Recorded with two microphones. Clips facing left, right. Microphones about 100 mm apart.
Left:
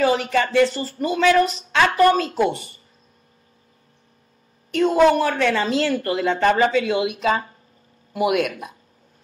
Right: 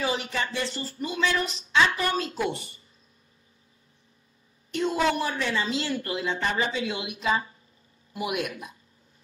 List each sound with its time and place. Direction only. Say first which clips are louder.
0.0 s a woman's voice: left 10 dB; 55° left (ahead or behind)
0.8 s a woman's voice: left 9 dB; 65° left (ahead or behind)
4.7 s a woman's voice: left 9 dB; 50° left (ahead or behind)